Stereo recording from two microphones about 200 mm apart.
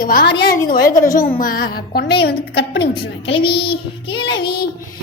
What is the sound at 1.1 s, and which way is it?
A woman's voice, 45° left (ahead or behind).